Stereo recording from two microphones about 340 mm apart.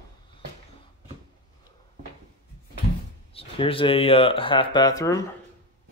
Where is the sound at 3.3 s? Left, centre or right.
Centre.